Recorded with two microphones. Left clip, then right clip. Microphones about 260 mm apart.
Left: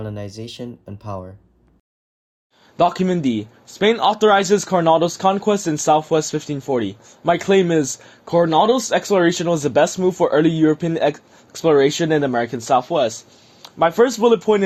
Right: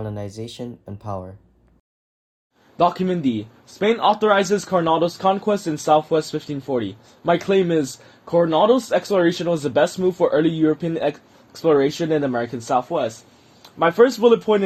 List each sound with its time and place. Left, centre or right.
0.0 s speech: centre
2.7 s a man's voice: left